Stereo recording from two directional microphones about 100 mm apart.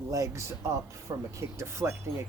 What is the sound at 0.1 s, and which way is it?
Speech, 30° right (ahead or behind).